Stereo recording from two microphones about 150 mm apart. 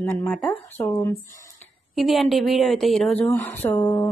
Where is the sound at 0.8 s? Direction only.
20° left (ahead or behind).